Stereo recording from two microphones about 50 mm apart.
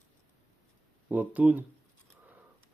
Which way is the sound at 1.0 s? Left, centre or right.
Right.